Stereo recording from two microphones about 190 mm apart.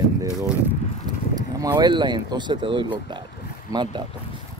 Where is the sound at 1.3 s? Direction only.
20° right (ahead or behind).